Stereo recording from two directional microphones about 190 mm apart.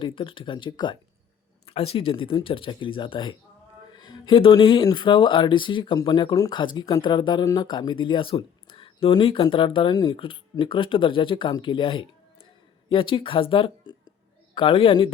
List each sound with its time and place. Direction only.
0.0 s speech: 25° left (ahead or behind)